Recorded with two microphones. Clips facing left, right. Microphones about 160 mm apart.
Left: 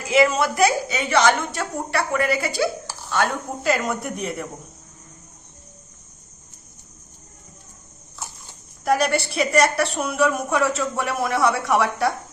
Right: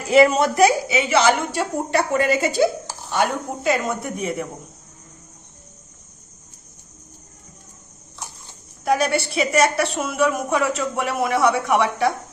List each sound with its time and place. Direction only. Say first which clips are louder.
0.1 s speech: right 4 dB; 35° right (ahead or behind)
0.6 s a woman's voice: right 3 dB; 10° right (ahead or behind)
1.9 s speech: right 2 dB; 25° right (ahead or behind)
3.6 s a woman's voice: right 1 dB; centre (ahead or behind)
8.8 s a woman's voice: even; centre (ahead or behind)